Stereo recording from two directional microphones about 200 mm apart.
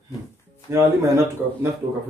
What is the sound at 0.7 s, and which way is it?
Speech, 15° right (ahead or behind).